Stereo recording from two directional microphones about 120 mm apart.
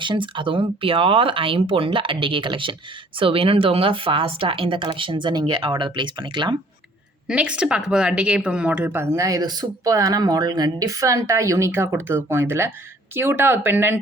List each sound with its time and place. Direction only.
0.0 s speech: 40° right (ahead or behind)
7.3 s speech: 10° right (ahead or behind)